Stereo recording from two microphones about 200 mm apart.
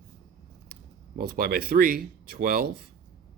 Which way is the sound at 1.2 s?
50° right (ahead or behind).